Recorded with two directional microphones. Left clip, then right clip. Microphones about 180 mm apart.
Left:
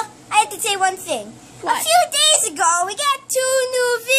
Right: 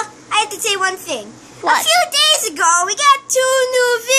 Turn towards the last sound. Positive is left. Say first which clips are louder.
# right 3 dB
turn(degrees=30)  # may be behind; listen again after turning